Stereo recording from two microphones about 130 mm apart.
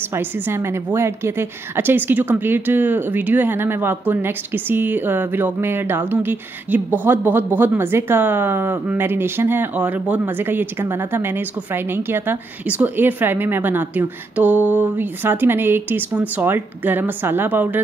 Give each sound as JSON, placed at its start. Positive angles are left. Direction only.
{"t": 0.1, "sound": "a woman's voice", "side_deg": -20}